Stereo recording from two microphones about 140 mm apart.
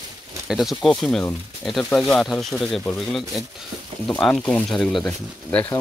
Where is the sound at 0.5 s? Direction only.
Centre (ahead or behind).